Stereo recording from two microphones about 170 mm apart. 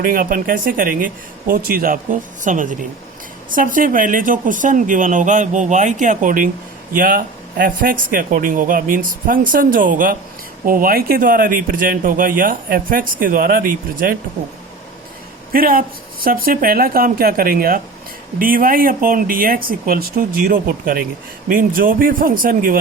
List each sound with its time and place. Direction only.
0.0 s speech: 55° right (ahead or behind)
15.5 s speech: 60° right (ahead or behind)